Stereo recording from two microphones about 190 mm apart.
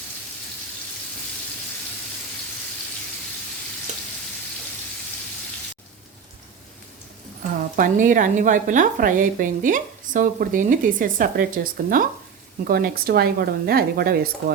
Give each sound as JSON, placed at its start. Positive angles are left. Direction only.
{"t": 7.8, "sound": "a woman's voice", "side_deg": -45}